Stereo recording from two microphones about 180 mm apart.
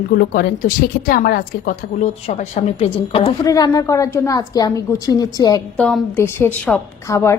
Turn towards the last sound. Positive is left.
turn(degrees=15)  # may be behind; listen again after turning